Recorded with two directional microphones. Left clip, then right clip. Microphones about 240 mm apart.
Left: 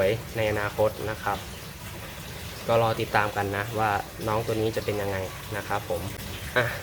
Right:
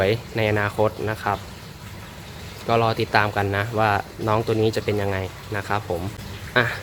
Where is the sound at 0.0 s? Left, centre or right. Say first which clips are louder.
Right 3 dB; right.